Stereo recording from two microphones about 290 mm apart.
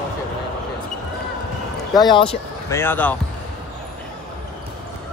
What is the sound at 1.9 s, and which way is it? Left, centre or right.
Speech, centre.